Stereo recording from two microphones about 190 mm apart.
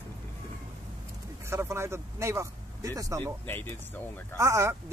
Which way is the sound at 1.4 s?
15° right (ahead or behind).